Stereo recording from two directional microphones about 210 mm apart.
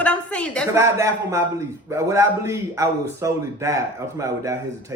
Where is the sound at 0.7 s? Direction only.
15° right (ahead or behind).